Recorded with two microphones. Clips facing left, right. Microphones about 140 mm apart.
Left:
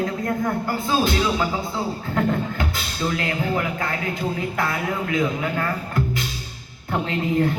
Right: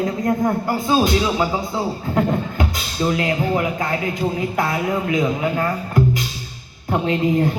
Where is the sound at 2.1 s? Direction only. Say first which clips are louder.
Right 2 dB; 20° right (ahead or behind).